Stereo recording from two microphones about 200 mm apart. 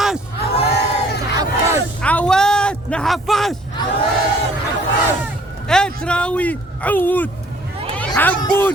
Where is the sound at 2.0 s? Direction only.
5° left (ahead or behind).